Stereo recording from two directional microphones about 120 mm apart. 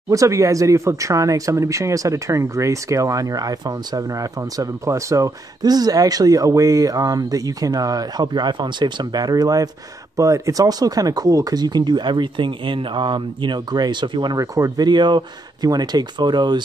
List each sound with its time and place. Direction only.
0.1 s speech: 25° right (ahead or behind)